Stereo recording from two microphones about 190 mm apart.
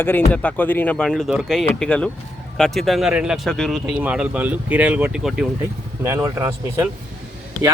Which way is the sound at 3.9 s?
10° right (ahead or behind).